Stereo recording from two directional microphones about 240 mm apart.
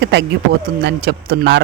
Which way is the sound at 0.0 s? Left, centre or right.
Right.